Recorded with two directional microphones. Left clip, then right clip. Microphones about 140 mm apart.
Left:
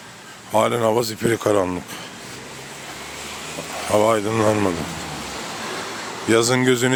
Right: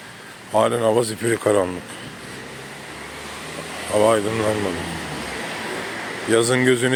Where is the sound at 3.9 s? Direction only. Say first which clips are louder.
Even; 80° left.